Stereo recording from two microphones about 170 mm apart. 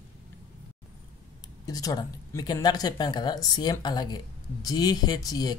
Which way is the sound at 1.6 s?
20° left (ahead or behind).